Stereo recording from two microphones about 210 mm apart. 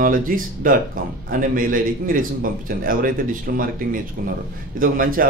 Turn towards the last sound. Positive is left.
turn(degrees=-40)  # may be behind; listen again after turning